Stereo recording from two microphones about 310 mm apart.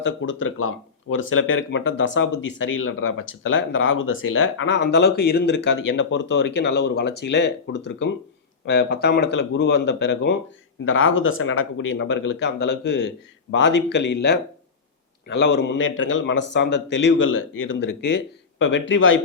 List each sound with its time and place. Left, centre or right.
0.0 s a man's voice: left